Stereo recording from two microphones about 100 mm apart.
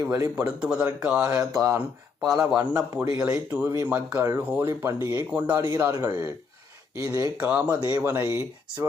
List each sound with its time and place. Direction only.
0.0 s a man's voice: 30° right (ahead or behind)
0.4 s speech: 10° right (ahead or behind)
1.5 s a man's voice: 30° right (ahead or behind)
2.2 s speech: 5° right (ahead or behind)
2.7 s a man's voice: 30° right (ahead or behind)
3.2 s speech: 10° right (ahead or behind); by 5.9 s 25° right (ahead or behind)
5.9 s a man's voice: 40° right (ahead or behind)
7.3 s speech: 15° right (ahead or behind)